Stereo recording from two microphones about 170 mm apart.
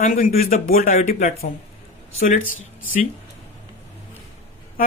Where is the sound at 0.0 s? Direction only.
50° left (ahead or behind).